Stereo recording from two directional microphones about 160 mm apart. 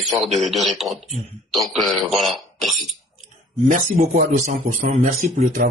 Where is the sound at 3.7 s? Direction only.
55° right (ahead or behind).